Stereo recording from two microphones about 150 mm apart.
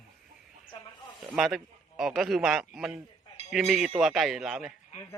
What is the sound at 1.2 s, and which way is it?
A man's voice, centre (ahead or behind).